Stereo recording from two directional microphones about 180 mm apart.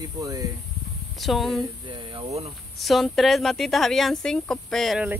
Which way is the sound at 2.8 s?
Centre (ahead or behind).